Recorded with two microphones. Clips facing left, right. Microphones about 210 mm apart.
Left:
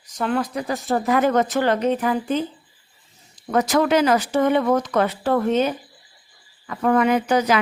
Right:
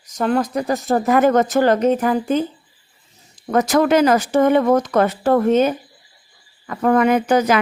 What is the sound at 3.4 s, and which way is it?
Speech, 45° right (ahead or behind).